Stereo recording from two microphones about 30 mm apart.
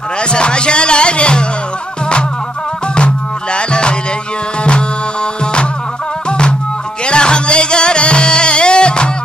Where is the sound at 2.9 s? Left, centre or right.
Left.